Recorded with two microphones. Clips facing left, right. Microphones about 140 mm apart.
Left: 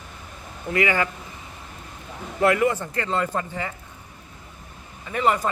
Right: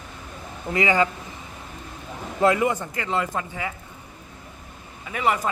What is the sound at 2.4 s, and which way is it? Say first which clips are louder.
Speech: even; 20° right (ahead or behind).